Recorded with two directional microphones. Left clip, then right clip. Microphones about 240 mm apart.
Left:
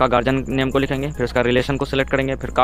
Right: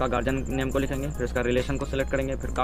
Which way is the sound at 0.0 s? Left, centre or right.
Left.